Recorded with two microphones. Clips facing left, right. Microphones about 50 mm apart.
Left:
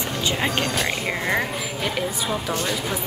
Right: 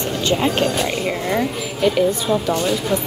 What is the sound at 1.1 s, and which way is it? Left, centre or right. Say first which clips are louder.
Speech: right 3 dB; left.